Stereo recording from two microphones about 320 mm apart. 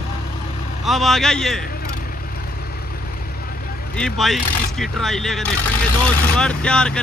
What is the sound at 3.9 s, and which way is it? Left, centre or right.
Speech, centre.